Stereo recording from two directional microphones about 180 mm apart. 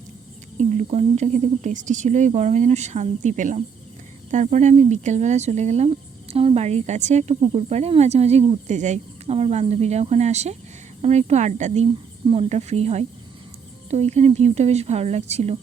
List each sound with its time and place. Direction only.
0.7 s speech: 40° right (ahead or behind)